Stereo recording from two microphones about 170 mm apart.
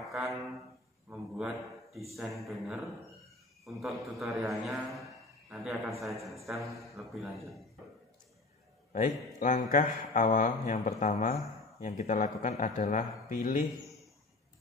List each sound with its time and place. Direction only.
0.0 s a sound: centre (ahead or behind)
1.3 s a man's voice: centre (ahead or behind)
8.9 s speech: 50° left (ahead or behind)